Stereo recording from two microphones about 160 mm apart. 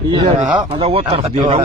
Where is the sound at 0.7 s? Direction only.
35° right (ahead or behind).